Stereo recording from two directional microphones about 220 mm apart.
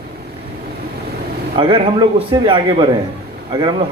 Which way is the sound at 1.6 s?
25° right (ahead or behind).